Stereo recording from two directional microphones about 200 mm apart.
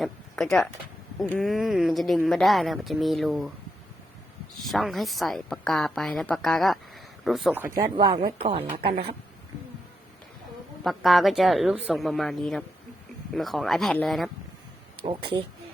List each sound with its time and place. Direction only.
0.0 s speech: centre (ahead or behind)
4.5 s speech: centre (ahead or behind)
7.9 s speech: 25° right (ahead or behind)
10.8 s speech: centre (ahead or behind)
15.0 s speech: 25° right (ahead or behind)